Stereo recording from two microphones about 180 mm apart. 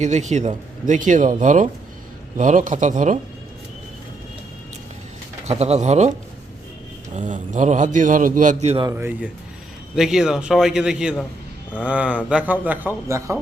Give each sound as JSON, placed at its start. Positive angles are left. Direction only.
{"t": 0.0, "sound": "speech", "side_deg": -40}
{"t": 5.5, "sound": "speech", "side_deg": -35}
{"t": 7.2, "sound": "speech", "side_deg": -45}
{"t": 8.9, "sound": "a man's voice", "side_deg": -10}